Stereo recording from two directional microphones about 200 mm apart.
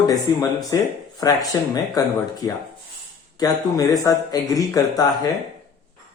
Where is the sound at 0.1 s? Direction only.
20° left (ahead or behind).